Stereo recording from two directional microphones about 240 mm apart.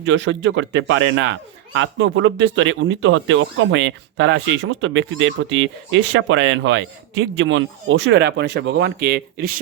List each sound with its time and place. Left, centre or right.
0.0 s a man's voice: right